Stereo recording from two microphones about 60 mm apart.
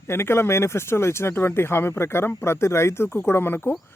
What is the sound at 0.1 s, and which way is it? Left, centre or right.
A man's voice, left.